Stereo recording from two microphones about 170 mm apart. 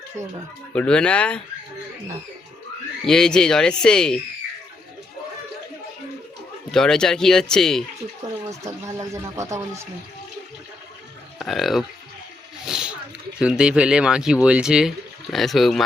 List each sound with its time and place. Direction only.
0.7 s speech: 5° left (ahead or behind)
3.1 s speech: 5° left (ahead or behind)
6.7 s speech: 5° left (ahead or behind)
8.4 s a sound: 20° right (ahead or behind)
11.3 s speech: centre (ahead or behind)
12.6 s a sound: 5° right (ahead or behind)
13.4 s speech: 5° right (ahead or behind)